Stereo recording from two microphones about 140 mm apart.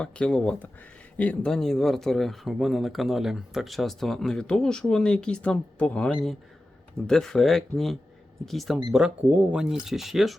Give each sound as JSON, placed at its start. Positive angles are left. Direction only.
{"t": 0.0, "sound": "speech", "side_deg": 5}